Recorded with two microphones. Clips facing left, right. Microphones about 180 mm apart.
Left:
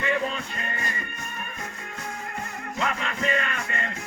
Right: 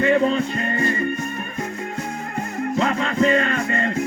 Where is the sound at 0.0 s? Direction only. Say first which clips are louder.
Right 10 dB; 35° right (ahead or behind).